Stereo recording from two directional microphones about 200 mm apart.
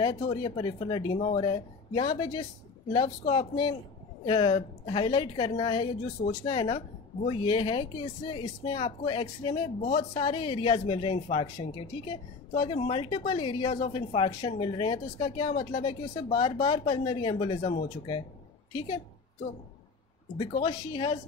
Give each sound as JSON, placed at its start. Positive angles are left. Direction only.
{"t": 0.0, "sound": "a woman's voice", "side_deg": 25}
{"t": 1.1, "sound": "speech", "side_deg": 35}
{"t": 1.4, "sound": "a woman's voice", "side_deg": 25}
{"t": 20.3, "sound": "a woman's voice", "side_deg": 25}